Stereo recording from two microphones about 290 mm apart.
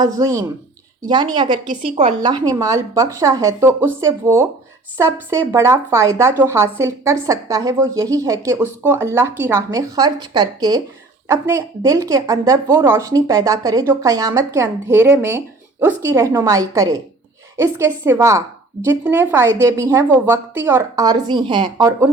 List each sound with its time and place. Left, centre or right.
0.0 s speech: centre